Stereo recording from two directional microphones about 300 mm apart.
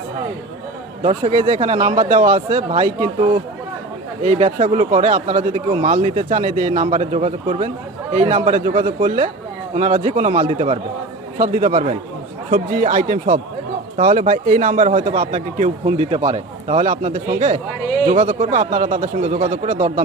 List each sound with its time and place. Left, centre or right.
1.0 s a man's voice: centre